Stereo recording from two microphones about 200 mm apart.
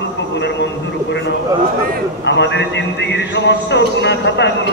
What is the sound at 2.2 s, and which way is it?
A man's voice, 60° left (ahead or behind).